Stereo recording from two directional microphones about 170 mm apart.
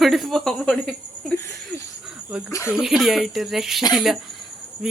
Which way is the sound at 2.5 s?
15° left (ahead or behind).